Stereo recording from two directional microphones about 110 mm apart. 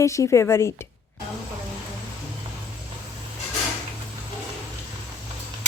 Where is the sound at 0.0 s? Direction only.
30° left (ahead or behind).